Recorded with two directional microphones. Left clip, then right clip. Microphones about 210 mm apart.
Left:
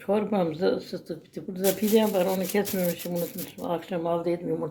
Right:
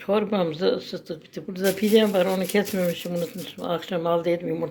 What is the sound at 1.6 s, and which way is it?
Speech, centre (ahead or behind).